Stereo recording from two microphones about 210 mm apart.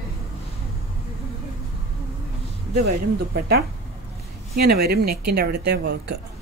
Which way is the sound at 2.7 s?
45° right (ahead or behind).